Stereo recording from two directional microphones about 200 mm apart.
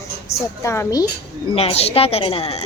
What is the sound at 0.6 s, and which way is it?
Speech, 15° left (ahead or behind).